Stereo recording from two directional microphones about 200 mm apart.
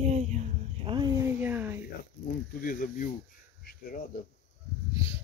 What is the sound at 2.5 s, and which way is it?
Speech, 45° left (ahead or behind).